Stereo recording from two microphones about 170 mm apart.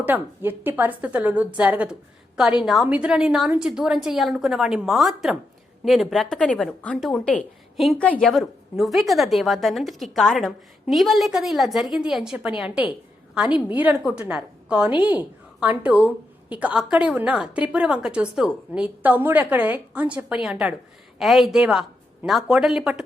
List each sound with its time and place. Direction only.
0.0 s a woman's voice: 10° right (ahead or behind)